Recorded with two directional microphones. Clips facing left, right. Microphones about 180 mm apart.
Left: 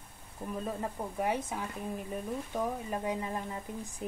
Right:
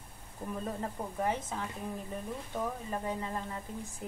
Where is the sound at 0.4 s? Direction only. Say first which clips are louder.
Left 1 dB; 15° left (ahead or behind).